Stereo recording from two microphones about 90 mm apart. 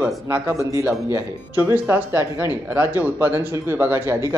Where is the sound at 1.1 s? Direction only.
20° right (ahead or behind).